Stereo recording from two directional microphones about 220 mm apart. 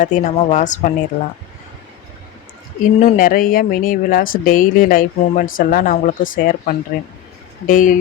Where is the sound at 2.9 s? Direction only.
35° left (ahead or behind).